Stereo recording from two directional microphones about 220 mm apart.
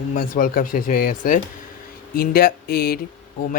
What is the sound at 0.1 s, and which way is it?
Speech, 40° left (ahead or behind).